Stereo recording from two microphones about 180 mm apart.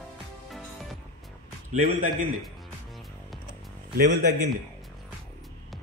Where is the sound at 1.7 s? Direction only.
45° right (ahead or behind).